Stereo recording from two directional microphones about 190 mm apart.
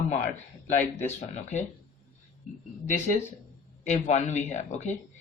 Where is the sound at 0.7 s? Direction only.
40° left (ahead or behind).